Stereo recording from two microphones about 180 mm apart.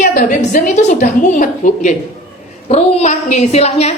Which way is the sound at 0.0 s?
45° left (ahead or behind).